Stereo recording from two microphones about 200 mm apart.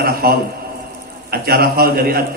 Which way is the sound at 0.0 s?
50° right (ahead or behind).